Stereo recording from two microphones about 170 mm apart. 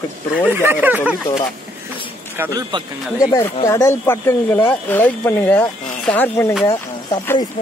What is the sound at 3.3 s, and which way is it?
Speech, 15° left (ahead or behind).